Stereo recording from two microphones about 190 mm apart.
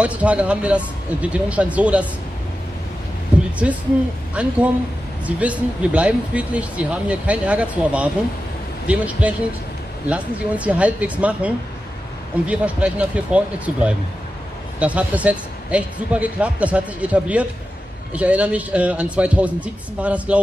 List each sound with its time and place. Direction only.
0.0 s speech: 5° right (ahead or behind)
3.6 s a woman's voice: 5° right (ahead or behind)